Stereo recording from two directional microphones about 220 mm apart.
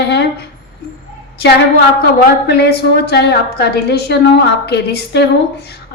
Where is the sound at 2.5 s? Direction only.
45° left (ahead or behind).